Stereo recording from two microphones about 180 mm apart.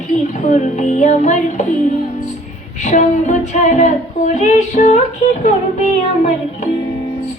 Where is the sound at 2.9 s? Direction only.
40° left (ahead or behind).